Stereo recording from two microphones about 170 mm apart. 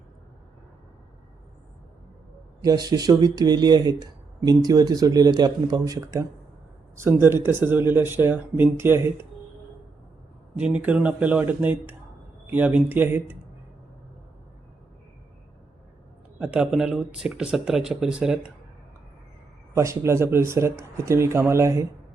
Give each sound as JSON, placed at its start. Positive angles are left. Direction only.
{"t": 2.6, "sound": "speech", "side_deg": -20}
{"t": 10.6, "sound": "speech", "side_deg": -10}
{"t": 16.4, "sound": "speech", "side_deg": -5}
{"t": 19.7, "sound": "speech", "side_deg": -15}